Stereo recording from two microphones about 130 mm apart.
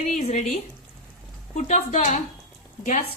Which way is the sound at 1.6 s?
65° left (ahead or behind).